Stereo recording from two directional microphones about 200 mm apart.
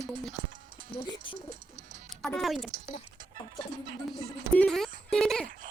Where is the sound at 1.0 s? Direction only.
25° left (ahead or behind).